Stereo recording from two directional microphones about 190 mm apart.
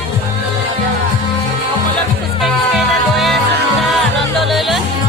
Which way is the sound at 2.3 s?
Centre (ahead or behind).